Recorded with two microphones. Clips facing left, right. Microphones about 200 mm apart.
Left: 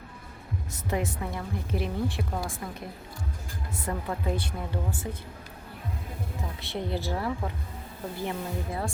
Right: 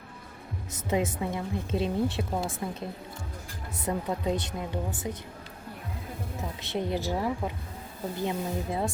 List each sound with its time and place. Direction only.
0.7 s a woman's voice: 20° right (ahead or behind)
6.6 s a woman's voice: 20° right (ahead or behind)